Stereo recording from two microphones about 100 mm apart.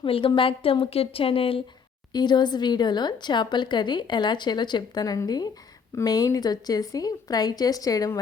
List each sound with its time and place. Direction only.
0.0 s a woman's voice: 60° left (ahead or behind)
2.1 s a woman's voice: 45° left (ahead or behind)